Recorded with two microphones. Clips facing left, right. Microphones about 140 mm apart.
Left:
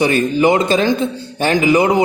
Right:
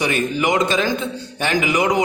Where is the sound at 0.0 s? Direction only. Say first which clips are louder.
Left 6 dB; 30° left (ahead or behind).